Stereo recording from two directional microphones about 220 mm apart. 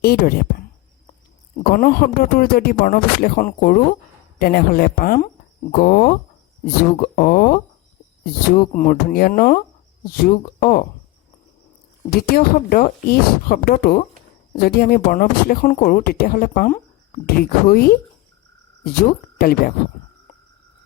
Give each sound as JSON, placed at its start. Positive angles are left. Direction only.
{"t": 0.0, "sound": "speech", "side_deg": 45}
{"t": 1.7, "sound": "speech", "side_deg": 40}
{"t": 12.1, "sound": "speech", "side_deg": 40}
{"t": 19.4, "sound": "speech", "side_deg": 40}